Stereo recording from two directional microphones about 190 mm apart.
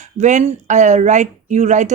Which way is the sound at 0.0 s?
40° right (ahead or behind).